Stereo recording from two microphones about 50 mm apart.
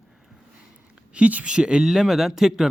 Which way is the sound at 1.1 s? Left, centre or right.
Right.